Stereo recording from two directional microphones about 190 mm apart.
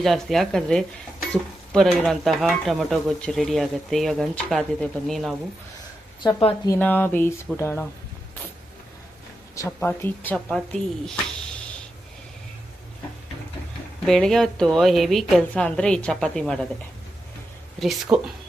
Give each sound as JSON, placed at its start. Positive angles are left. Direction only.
{"t": 0.0, "sound": "stir", "side_deg": 0}
{"t": 6.2, "sound": "a woman's voice", "side_deg": 20}
{"t": 6.7, "sound": "speech", "side_deg": 10}
{"t": 9.6, "sound": "speech", "side_deg": 10}
{"t": 14.1, "sound": "stir", "side_deg": 5}
{"t": 17.7, "sound": "stir", "side_deg": 0}